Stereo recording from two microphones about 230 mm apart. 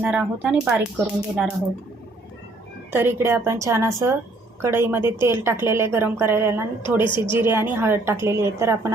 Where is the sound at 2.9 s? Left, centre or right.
Centre.